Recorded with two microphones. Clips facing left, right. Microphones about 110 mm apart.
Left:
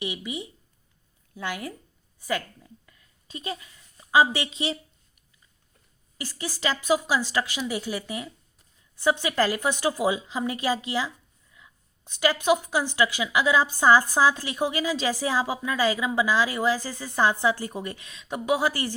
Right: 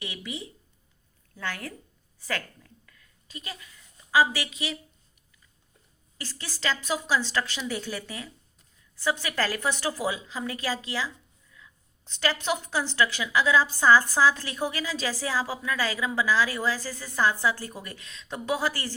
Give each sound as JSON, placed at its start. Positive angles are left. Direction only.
{"t": 0.0, "sound": "a woman's voice", "side_deg": 15}
{"t": 6.1, "sound": "a woman's voice", "side_deg": 15}